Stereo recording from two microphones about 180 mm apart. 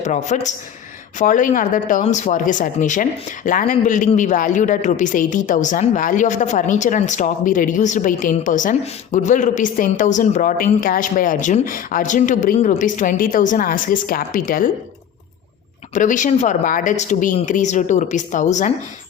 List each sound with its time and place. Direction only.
0.0 s a man's voice: 40° left (ahead or behind)
16.0 s speech: 45° left (ahead or behind)